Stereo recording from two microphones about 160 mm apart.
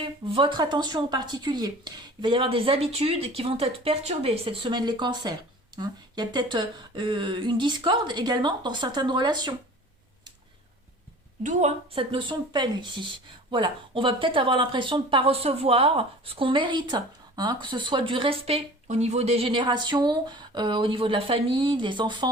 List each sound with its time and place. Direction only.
0.0 s speech: 30° right (ahead or behind)
11.9 s speech: 30° right (ahead or behind)